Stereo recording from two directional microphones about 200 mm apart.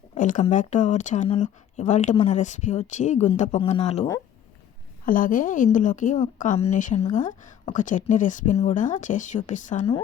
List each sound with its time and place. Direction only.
0.1 s a woman's voice: 40° left (ahead or behind)
5.0 s a woman's voice: 40° left (ahead or behind)